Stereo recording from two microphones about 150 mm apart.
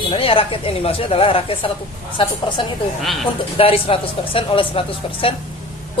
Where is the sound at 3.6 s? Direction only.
40° left (ahead or behind).